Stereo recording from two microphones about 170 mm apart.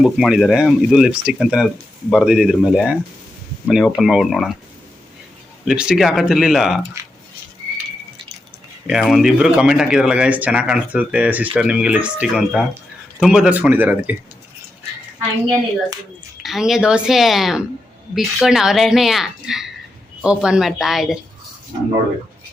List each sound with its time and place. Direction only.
0.0 s speech: centre (ahead or behind)
5.6 s speech: 5° right (ahead or behind)
7.0 s a sound: 20° right (ahead or behind)
8.9 s speech: centre (ahead or behind)
16.4 s speech: centre (ahead or behind)